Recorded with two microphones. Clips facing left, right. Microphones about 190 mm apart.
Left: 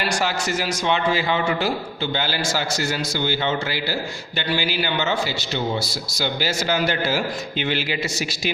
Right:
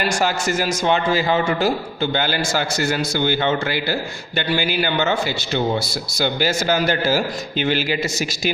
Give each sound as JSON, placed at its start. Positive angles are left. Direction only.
{"t": 0.0, "sound": "a man's voice", "side_deg": -45}